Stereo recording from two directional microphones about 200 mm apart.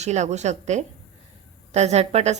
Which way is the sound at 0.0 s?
35° right (ahead or behind).